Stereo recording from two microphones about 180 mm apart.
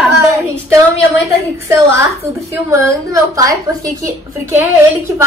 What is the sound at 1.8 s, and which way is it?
A woman's voice, 15° right (ahead or behind).